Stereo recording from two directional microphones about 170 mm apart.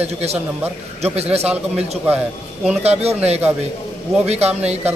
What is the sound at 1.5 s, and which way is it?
Speech, 5° right (ahead or behind).